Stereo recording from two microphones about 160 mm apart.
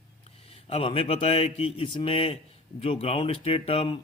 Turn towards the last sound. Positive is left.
turn(degrees=35)  # may be behind; listen again after turning